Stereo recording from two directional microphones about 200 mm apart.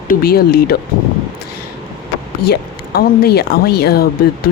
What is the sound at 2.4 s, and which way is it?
Speech, 50° left (ahead or behind).